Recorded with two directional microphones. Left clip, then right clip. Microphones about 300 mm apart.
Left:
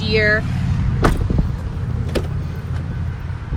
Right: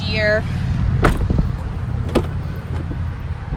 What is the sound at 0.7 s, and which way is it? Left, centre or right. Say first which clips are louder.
Vehicle: even; centre.